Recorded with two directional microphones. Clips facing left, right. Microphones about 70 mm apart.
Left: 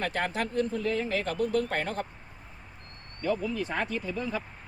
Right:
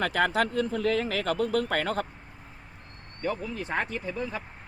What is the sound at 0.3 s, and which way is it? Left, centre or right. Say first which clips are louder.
Speech: right 3 dB; right.